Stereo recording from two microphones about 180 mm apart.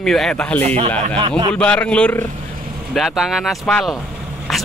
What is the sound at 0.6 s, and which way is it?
Speech, 35° right (ahead or behind).